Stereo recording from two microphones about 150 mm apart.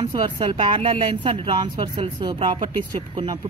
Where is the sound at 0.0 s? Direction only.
30° right (ahead or behind).